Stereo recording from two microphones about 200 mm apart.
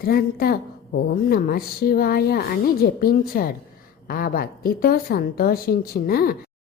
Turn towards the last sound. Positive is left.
turn(degrees=50)  # may be behind; listen again after turning